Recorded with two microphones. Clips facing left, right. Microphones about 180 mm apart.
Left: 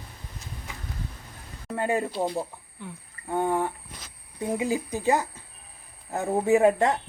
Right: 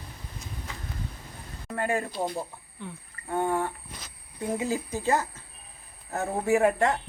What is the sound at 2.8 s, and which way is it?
Speech, 10° left (ahead or behind).